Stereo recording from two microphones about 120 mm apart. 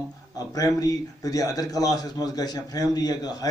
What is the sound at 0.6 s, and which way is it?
A man's voice, 30° left (ahead or behind).